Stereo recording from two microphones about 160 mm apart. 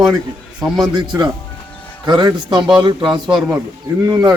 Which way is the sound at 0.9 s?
25° right (ahead or behind).